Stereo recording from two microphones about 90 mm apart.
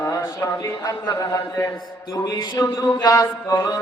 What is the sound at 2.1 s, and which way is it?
Mantra, 50° left (ahead or behind).